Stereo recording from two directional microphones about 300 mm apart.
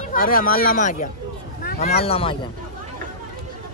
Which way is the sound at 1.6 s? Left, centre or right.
Left.